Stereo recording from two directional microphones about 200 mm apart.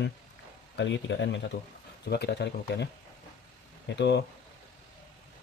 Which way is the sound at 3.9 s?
60° left (ahead or behind).